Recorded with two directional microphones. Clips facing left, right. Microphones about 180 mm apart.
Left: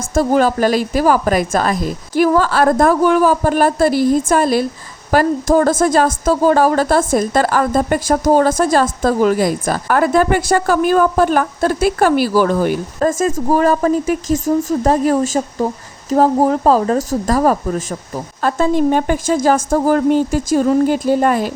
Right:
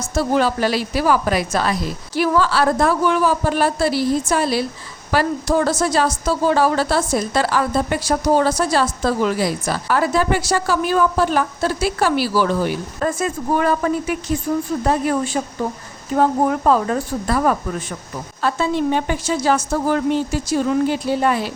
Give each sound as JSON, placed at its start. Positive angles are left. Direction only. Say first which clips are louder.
{"t": 0.1, "sound": "a woman's voice", "louder": "left 4 dB", "side_deg": 45}